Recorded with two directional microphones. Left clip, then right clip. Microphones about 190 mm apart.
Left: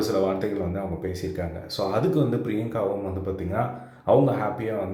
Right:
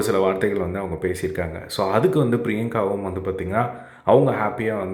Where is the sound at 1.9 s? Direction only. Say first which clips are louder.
Right 5 dB; 25° right (ahead or behind).